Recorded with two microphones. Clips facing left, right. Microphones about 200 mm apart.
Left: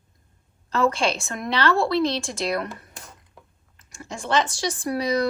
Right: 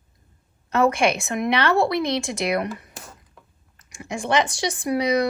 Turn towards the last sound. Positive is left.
turn(degrees=-20)  # may be behind; listen again after turning